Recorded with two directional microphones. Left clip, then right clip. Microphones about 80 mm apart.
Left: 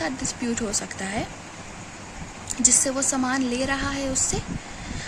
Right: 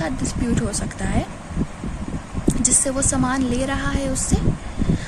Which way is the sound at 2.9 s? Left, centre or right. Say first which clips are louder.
Right 3 dB; centre.